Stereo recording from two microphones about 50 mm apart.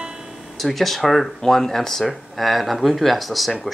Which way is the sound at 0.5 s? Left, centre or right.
Centre.